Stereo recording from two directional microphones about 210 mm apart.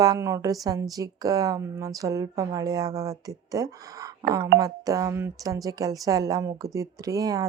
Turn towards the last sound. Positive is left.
turn(degrees=-15)  # may be behind; listen again after turning